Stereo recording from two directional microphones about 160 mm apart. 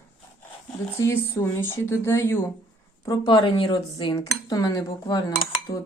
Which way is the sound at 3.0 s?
25° left (ahead or behind).